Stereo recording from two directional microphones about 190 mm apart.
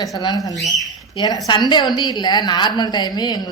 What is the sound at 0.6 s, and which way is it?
Speech, centre (ahead or behind).